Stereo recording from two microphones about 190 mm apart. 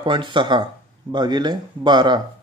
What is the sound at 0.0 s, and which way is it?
Speech, 25° right (ahead or behind).